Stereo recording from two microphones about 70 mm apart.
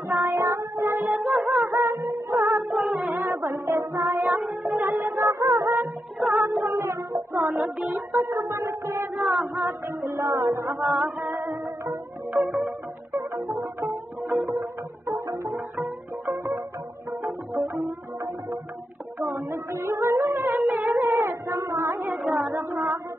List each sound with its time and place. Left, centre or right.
0.1 s music: right
6.2 s child singing: right
8.1 s music: right
11.1 s music: right
20.5 s music: right
21.0 s a sound: right